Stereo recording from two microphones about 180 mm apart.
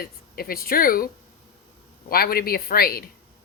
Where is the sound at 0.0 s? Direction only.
55° left (ahead or behind).